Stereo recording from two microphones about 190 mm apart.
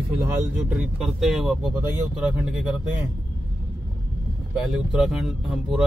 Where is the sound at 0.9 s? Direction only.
5° right (ahead or behind).